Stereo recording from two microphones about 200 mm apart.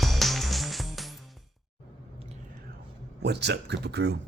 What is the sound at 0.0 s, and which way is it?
Music, centre (ahead or behind).